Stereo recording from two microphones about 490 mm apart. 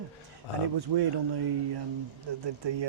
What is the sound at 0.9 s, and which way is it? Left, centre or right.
Speech, right.